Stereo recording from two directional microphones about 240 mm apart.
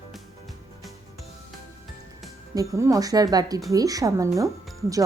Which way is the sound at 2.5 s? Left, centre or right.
Centre.